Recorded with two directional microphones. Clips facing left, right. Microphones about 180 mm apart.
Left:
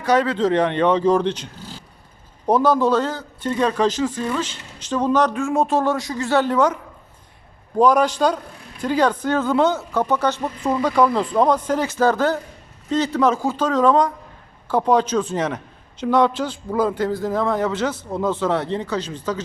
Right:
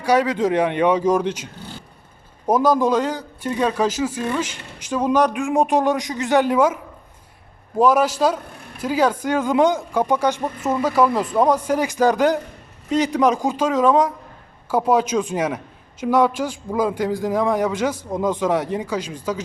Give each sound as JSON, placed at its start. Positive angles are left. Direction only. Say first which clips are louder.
{"t": 0.0, "sound": "a man's voice", "louder": "even", "side_deg": -10}
{"t": 2.5, "sound": "a man's voice", "louder": "even", "side_deg": -10}
{"t": 7.8, "sound": "a man's voice", "louder": "even", "side_deg": -5}